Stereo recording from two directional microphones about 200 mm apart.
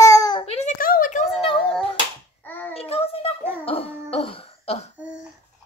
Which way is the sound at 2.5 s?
10° left (ahead or behind).